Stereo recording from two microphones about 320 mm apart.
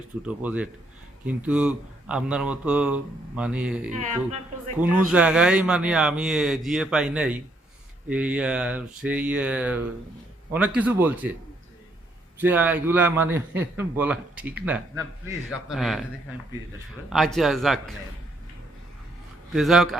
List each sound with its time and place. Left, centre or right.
0.2 s a man's voice: centre
3.9 s a woman's voice: right
5.0 s a man's voice: centre
12.4 s a man's voice: centre
17.1 s a man's voice: centre
19.5 s a man's voice: centre